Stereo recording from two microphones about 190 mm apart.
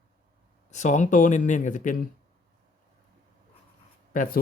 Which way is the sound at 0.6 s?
40° left (ahead or behind).